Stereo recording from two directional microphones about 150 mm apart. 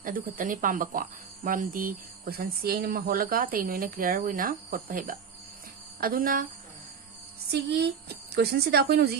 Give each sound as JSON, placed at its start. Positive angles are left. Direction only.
{"t": 0.0, "sound": "speech", "side_deg": -65}
{"t": 7.5, "sound": "speech", "side_deg": -90}